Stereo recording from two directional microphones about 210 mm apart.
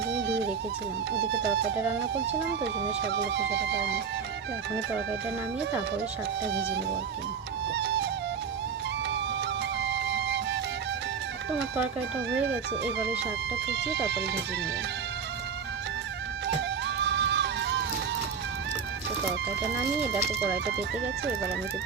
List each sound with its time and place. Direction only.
0.1 s music: 55° right (ahead or behind)
1.1 s speech: 55° right (ahead or behind)
3.1 s speech: 55° right (ahead or behind)
6.5 s speech: 55° right (ahead or behind)
7.7 s music: 55° right (ahead or behind)
9.8 s music: 55° right (ahead or behind)
13.7 s speech: 55° right (ahead or behind)
17.0 s music: 55° right (ahead or behind)